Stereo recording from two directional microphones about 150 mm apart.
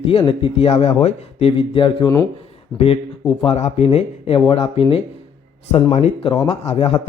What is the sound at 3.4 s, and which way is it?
Speech, 45° left (ahead or behind).